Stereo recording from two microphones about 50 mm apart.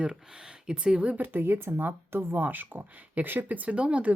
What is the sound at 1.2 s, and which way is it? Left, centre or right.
Speech, right.